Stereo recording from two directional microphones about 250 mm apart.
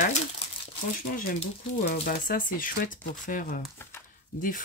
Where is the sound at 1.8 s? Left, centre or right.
Left.